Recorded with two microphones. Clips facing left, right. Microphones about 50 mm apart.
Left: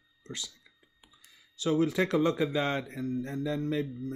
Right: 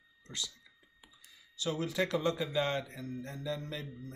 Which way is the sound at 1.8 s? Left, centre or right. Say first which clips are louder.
Left 6 dB; left.